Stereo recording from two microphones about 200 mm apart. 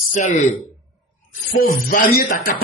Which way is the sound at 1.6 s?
45° left (ahead or behind).